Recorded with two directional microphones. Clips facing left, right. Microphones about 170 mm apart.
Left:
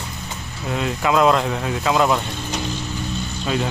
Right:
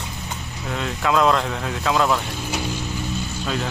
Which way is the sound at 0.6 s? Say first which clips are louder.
Left 3 dB; 5° left (ahead or behind).